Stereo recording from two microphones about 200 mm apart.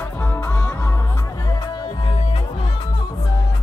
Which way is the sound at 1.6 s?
25° left (ahead or behind).